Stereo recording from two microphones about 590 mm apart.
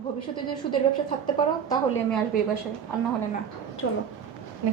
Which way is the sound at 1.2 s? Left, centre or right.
Centre.